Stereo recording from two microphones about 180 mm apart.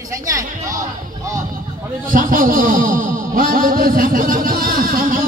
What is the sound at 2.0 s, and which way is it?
Speech, 50° right (ahead or behind).